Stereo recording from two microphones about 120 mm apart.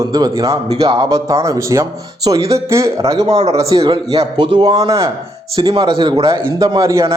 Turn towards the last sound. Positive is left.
turn(degrees=-25)  # may be behind; listen again after turning